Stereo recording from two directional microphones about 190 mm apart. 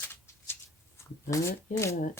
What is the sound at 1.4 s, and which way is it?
Speech, 50° left (ahead or behind).